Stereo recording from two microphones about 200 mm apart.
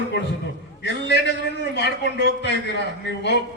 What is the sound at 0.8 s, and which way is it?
A man's voice, 60° left (ahead or behind).